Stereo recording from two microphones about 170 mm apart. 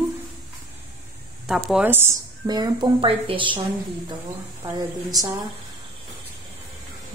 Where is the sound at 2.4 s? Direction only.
25° right (ahead or behind).